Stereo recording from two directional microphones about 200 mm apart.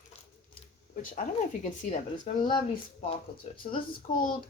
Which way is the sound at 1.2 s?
40° left (ahead or behind).